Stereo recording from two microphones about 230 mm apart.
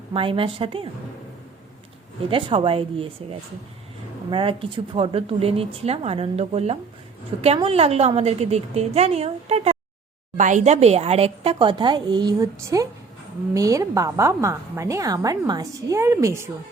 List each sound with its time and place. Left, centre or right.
0.1 s a woman's voice: right
2.3 s a woman's voice: right
4.3 s a woman's voice: right